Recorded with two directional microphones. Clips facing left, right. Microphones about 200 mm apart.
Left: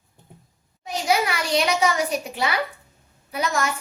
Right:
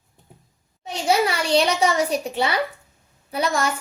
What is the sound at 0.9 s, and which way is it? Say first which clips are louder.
A child's voice: right 2 dB; 30° right (ahead or behind).